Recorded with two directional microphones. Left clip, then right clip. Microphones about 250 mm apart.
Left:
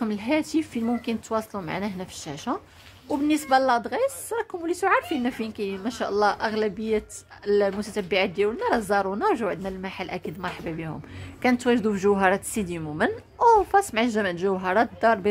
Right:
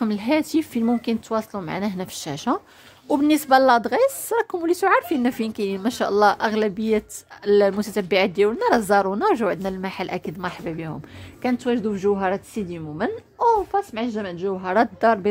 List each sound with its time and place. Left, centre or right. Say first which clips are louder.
0.0 s speech: right 4 dB; right
11.4 s a woman's voice: left 1 dB; centre
14.7 s a woman's voice: right 3 dB; centre